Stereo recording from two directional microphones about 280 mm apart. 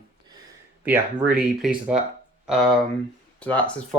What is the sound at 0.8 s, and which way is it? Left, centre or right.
Speech, centre.